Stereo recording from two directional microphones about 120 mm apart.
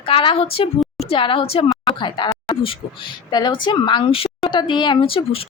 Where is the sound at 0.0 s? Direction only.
45° left (ahead or behind).